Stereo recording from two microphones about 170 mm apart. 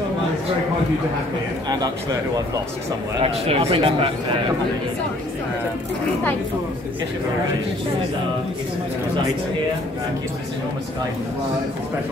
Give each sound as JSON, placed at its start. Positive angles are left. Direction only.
{"t": 3.2, "sound": "speech", "side_deg": -35}